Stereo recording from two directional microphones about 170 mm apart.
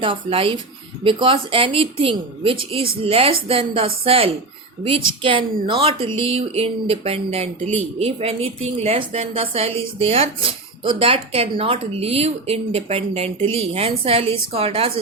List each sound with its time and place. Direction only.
0.0 s speech: 30° right (ahead or behind)